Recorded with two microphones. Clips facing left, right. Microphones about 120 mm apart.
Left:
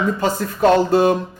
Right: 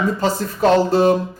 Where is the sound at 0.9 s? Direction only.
50° left (ahead or behind).